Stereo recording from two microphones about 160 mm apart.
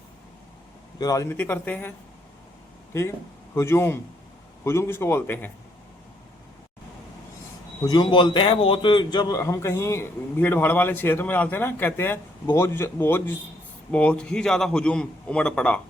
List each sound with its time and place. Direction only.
0.9 s a man's voice: 20° left (ahead or behind)
2.9 s a man's voice: 20° left (ahead or behind)
7.8 s a man's voice: 25° left (ahead or behind)
9.4 s a man's voice: 15° left (ahead or behind)